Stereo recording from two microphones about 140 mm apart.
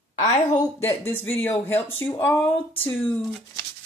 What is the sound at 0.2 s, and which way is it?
Speech, 55° left (ahead or behind).